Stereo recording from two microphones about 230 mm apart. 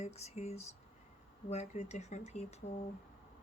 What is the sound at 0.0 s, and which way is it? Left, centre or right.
Speech, left.